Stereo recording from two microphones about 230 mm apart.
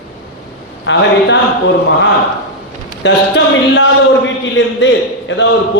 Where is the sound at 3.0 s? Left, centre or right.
Left.